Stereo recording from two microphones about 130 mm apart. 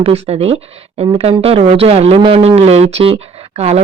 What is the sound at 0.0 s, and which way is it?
Speech, 50° right (ahead or behind).